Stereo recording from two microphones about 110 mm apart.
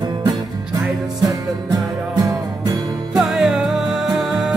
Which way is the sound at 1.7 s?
30° right (ahead or behind).